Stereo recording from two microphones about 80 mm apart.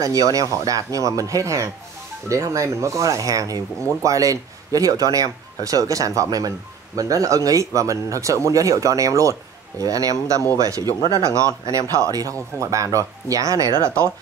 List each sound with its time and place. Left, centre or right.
0.0 s speech: right